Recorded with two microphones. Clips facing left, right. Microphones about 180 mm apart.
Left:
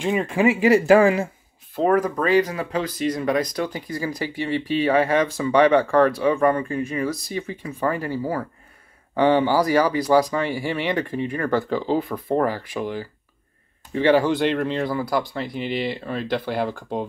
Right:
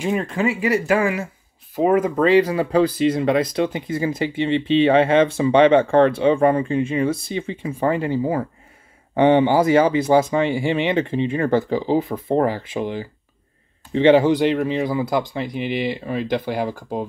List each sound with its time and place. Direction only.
0.0 s speech: centre (ahead or behind)
0.4 s speech: 20° left (ahead or behind)
1.8 s speech: 20° right (ahead or behind)
14.4 s speech: 10° right (ahead or behind)